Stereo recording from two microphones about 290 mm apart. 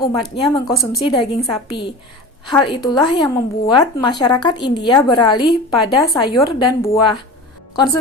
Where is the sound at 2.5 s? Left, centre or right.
Centre.